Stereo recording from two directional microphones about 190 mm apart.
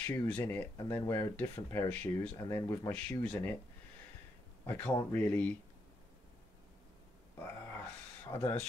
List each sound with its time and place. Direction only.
0.0 s speech: 10° left (ahead or behind)
2.3 s speech: 20° left (ahead or behind)
4.6 s speech: 10° left (ahead or behind)
7.3 s a sound: 10° left (ahead or behind)
8.3 s speech: 15° left (ahead or behind)